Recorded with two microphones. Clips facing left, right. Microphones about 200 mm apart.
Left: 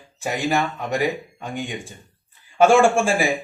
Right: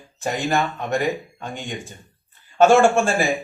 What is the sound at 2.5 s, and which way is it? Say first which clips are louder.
Speech: right 1 dB; 10° left (ahead or behind).